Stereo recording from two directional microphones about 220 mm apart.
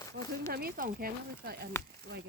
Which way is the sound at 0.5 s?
40° right (ahead or behind).